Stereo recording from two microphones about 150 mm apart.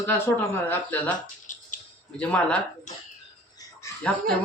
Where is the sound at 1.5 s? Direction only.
55° left (ahead or behind).